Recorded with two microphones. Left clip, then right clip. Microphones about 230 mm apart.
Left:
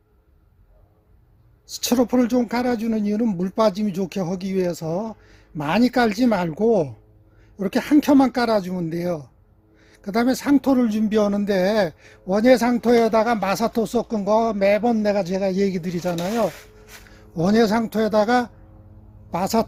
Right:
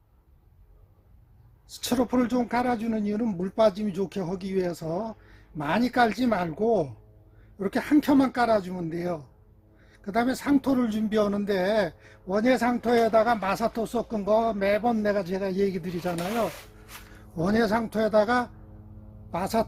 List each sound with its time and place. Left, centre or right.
1.7 s speech: left
17.3 s speech: left